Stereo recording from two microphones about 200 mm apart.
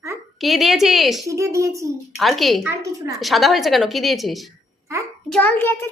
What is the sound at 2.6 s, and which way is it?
Speech, 15° right (ahead or behind).